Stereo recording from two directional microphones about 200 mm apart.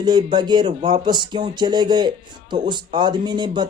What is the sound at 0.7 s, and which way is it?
Speech, 35° right (ahead or behind).